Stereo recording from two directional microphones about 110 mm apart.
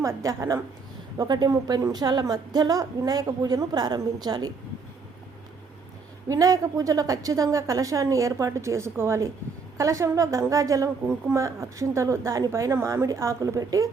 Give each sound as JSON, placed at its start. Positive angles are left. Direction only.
{"t": 0.0, "sound": "a woman's voice", "side_deg": -30}
{"t": 6.2, "sound": "a woman's voice", "side_deg": -30}